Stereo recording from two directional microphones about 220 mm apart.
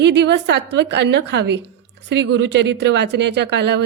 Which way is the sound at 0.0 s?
55° right (ahead or behind).